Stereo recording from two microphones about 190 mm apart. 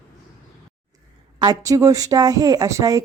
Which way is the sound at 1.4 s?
20° right (ahead or behind).